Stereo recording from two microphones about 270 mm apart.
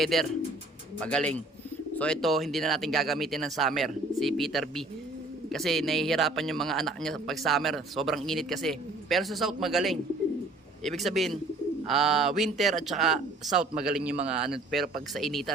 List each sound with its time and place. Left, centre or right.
0.0 s a man's voice: centre